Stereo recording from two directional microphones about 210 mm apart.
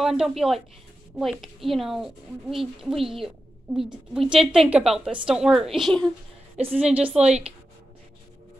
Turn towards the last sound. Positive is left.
turn(degrees=-5)  # may be behind; listen again after turning